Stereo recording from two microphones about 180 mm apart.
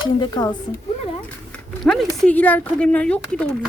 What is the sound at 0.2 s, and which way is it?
Speech, 25° left (ahead or behind).